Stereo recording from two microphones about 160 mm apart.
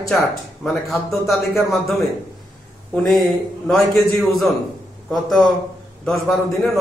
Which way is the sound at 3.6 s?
Centre (ahead or behind).